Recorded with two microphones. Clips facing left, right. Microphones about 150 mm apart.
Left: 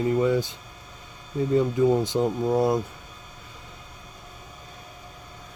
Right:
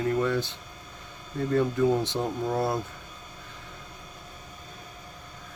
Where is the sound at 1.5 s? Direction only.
10° left (ahead or behind).